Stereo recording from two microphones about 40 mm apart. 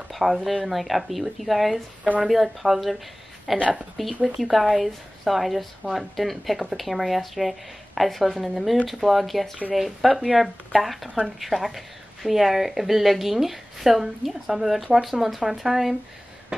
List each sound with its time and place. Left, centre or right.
0.1 s speech: centre